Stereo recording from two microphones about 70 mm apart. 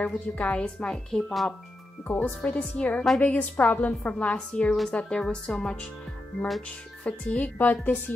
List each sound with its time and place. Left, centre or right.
0.0 s speech: centre
2.0 s speech: left
7.1 s speech: left